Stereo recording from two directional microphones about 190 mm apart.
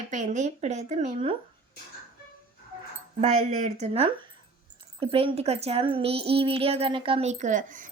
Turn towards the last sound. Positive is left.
turn(degrees=-45)  # may be behind; listen again after turning